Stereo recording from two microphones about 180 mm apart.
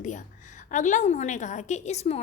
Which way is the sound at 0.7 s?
45° left (ahead or behind).